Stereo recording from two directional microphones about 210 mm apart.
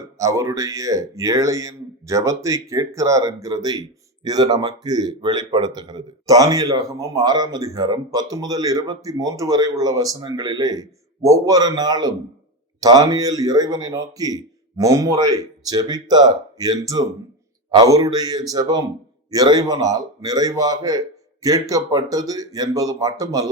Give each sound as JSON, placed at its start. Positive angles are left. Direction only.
{"t": 0.2, "sound": "speech", "side_deg": -15}